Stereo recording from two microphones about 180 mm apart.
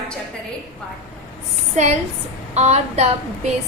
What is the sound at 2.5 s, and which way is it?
Speech, 40° right (ahead or behind).